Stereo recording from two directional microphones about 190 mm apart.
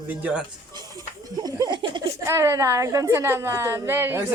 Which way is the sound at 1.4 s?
20° right (ahead or behind).